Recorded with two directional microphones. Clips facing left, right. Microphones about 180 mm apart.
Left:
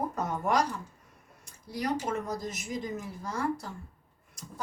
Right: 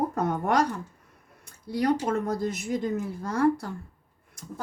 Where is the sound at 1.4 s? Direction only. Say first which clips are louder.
Right 7 dB; 60° right (ahead or behind).